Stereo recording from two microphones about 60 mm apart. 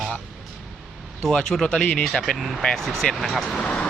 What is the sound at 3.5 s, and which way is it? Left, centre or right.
Speech, centre.